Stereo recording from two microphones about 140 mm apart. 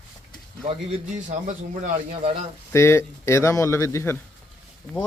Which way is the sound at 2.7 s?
20° left (ahead or behind).